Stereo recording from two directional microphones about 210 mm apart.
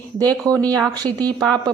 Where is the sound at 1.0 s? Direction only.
20° right (ahead or behind).